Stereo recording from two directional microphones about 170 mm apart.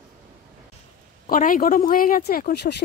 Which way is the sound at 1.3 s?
55° left (ahead or behind).